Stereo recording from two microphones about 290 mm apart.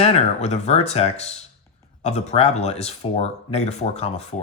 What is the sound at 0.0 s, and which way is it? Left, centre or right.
Speech, left.